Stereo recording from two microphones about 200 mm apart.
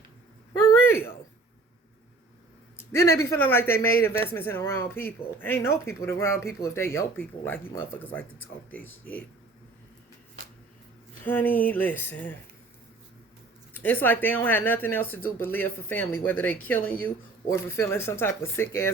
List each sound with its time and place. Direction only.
0.5 s a sound: 15° left (ahead or behind)
2.7 s speech: 15° left (ahead or behind)
11.2 s speech: 10° left (ahead or behind)
13.7 s speech: 10° left (ahead or behind)